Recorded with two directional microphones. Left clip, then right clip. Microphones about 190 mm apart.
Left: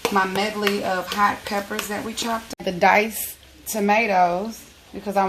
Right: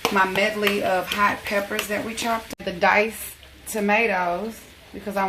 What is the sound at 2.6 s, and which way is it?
Speech, 65° left (ahead or behind).